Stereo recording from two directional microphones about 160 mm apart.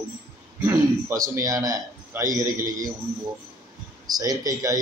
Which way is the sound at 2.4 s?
55° right (ahead or behind).